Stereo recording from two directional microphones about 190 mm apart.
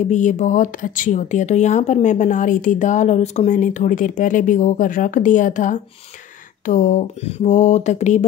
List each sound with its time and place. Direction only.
0.0 s speech: 40° left (ahead or behind)